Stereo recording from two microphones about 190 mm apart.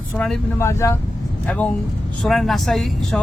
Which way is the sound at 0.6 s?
15° left (ahead or behind).